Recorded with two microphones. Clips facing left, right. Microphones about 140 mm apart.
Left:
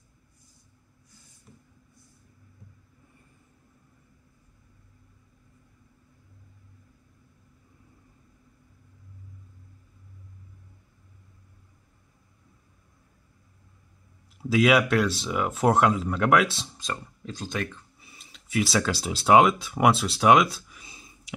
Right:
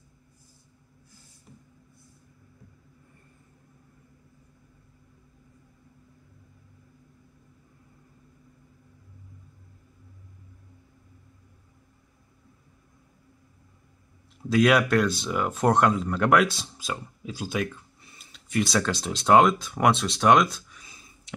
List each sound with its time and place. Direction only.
14.4 s speech: centre (ahead or behind)
20.8 s whispering: 15° left (ahead or behind)